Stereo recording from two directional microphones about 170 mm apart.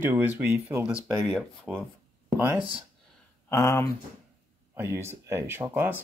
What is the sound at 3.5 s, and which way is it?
Speech, 20° left (ahead or behind).